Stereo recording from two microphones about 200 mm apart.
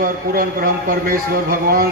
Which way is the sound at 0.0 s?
45° right (ahead or behind).